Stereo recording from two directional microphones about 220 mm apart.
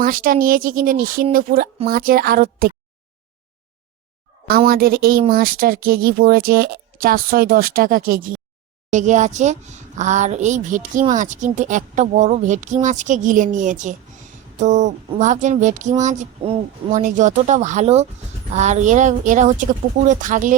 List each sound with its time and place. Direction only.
0.0 s speech: 40° right (ahead or behind)
4.4 s a woman's voice: 40° right (ahead or behind)